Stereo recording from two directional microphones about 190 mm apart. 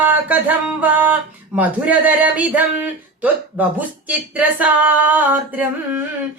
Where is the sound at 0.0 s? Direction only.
10° right (ahead or behind).